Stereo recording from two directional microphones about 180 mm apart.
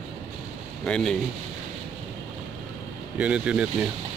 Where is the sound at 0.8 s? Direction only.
5° left (ahead or behind).